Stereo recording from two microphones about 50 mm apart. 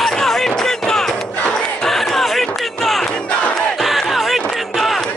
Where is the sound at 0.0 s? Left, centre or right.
Centre.